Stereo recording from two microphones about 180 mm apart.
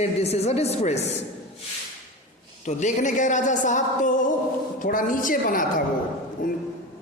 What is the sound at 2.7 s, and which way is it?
A woman's voice, 40° left (ahead or behind).